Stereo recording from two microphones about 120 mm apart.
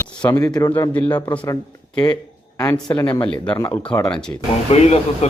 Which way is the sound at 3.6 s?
30° left (ahead or behind).